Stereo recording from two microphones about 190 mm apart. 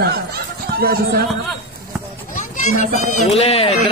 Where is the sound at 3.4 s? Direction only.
30° left (ahead or behind).